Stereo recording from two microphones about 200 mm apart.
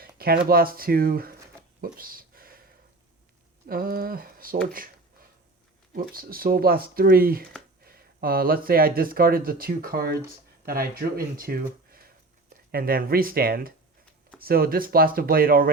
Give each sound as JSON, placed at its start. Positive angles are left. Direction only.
{"t": 0.2, "sound": "speech", "side_deg": -50}
{"t": 1.8, "sound": "a sound", "side_deg": -45}
{"t": 3.7, "sound": "speech", "side_deg": -45}
{"t": 5.9, "sound": "speech", "side_deg": -50}